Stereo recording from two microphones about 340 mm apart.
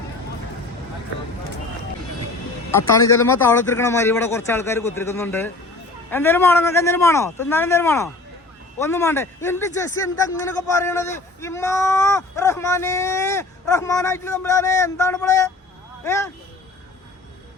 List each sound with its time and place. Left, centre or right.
2.7 s speech: centre